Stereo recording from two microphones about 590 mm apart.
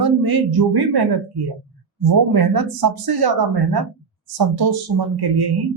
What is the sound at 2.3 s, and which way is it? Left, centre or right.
Speech, right.